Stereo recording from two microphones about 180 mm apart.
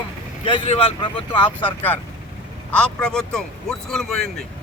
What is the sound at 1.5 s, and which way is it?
A man's voice, 10° left (ahead or behind).